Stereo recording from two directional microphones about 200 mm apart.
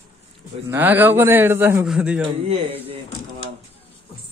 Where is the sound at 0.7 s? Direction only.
10° right (ahead or behind).